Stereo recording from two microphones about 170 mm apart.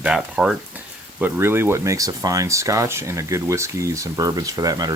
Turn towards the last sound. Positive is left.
turn(degrees=-20)  # may be behind; listen again after turning